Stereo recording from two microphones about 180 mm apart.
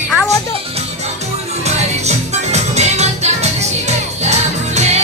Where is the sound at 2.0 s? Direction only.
40° right (ahead or behind).